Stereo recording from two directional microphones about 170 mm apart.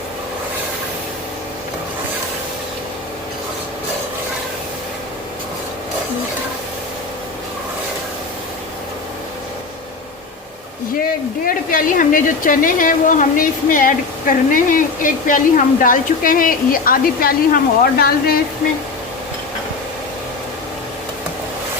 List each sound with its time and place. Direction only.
11.4 s a woman's voice: 55° left (ahead or behind)